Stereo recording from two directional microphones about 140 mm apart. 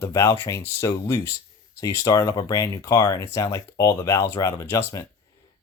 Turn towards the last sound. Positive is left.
turn(degrees=20)  # may be behind; listen again after turning